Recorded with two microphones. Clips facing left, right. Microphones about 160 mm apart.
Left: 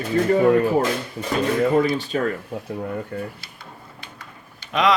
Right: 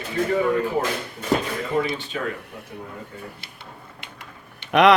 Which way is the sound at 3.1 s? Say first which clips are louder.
Left 9 dB; 65° left (ahead or behind).